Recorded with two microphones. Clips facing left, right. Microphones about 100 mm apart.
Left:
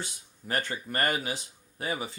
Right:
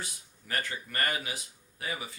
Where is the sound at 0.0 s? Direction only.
30° left (ahead or behind).